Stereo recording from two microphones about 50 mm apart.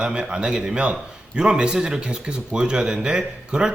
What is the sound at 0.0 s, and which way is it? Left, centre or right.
A woman's voice, centre.